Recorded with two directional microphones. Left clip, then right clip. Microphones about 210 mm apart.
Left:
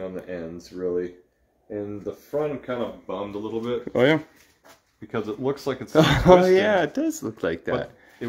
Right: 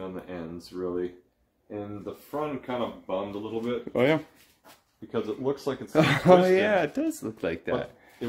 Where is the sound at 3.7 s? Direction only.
15° left (ahead or behind).